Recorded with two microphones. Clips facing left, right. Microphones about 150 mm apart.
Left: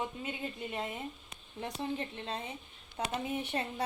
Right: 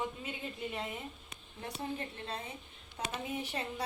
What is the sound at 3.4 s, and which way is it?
Speech, 25° left (ahead or behind).